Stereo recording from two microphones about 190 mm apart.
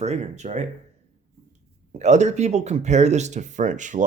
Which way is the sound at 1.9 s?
40° right (ahead or behind).